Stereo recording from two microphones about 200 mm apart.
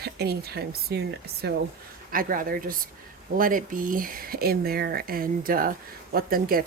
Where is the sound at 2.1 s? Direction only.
45° right (ahead or behind).